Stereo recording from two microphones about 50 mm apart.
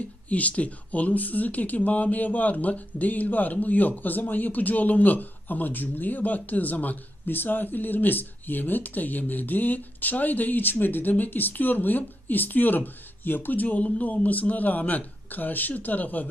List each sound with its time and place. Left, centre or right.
0.3 s speech: left